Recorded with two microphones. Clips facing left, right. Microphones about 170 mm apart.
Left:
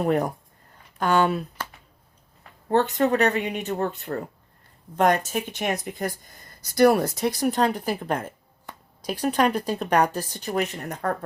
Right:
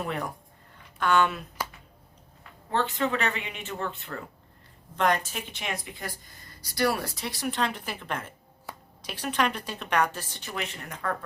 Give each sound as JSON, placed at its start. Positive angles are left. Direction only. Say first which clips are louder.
{"t": 0.0, "sound": "speech", "louder": "left 9 dB", "side_deg": 45}
{"t": 2.6, "sound": "speech", "louder": "left 7 dB", "side_deg": 45}